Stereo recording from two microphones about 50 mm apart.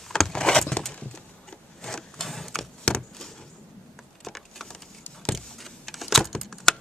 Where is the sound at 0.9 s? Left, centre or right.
Centre.